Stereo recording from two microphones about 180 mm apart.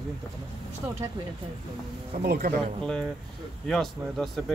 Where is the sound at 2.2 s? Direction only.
55° right (ahead or behind).